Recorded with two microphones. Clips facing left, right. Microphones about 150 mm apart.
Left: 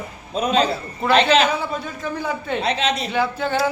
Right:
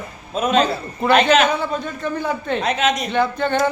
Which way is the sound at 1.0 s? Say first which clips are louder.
Right 2 dB; centre (ahead or behind).